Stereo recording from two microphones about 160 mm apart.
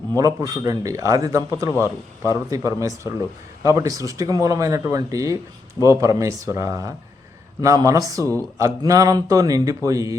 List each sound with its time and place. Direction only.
0.2 s speech: 25° right (ahead or behind)